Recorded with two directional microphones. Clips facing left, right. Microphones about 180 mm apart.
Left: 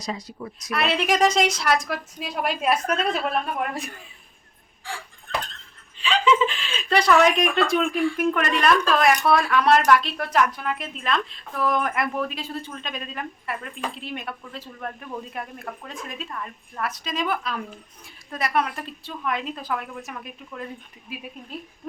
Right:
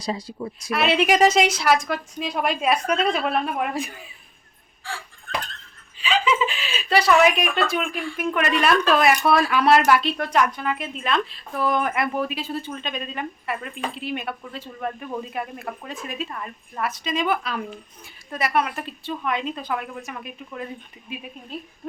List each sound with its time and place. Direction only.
0.0 s a woman's voice: 30° right (ahead or behind)
0.7 s speech: centre (ahead or behind)
6.0 s speech: 5° right (ahead or behind)